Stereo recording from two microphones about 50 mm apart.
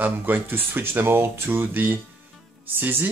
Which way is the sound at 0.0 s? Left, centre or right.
Right.